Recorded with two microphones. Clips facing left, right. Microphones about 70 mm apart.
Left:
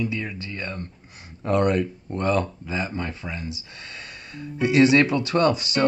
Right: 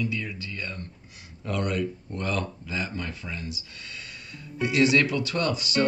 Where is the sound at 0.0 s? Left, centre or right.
Left.